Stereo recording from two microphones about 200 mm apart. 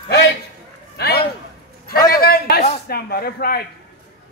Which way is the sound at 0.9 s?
55° left (ahead or behind).